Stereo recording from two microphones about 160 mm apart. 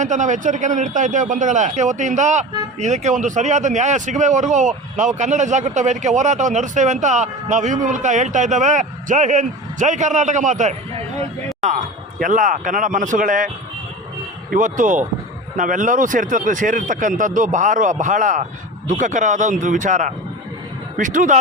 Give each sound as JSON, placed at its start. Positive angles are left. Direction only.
{"t": 0.0, "sound": "a man's voice", "side_deg": -50}
{"t": 14.5, "sound": "a man's voice", "side_deg": -55}